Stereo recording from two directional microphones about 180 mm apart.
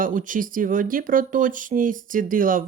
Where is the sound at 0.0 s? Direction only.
50° right (ahead or behind).